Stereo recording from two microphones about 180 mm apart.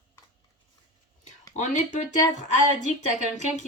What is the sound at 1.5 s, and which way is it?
Speech, 40° left (ahead or behind).